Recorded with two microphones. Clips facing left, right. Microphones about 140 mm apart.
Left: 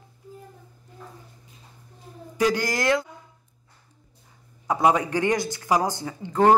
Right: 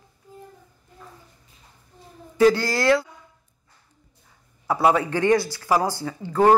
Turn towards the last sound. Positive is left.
turn(degrees=20)  # may be behind; listen again after turning